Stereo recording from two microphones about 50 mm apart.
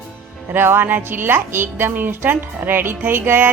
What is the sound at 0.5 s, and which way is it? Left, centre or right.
A woman's voice, right.